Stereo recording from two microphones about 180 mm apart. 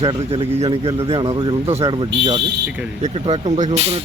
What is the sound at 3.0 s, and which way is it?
Speech, 40° right (ahead or behind).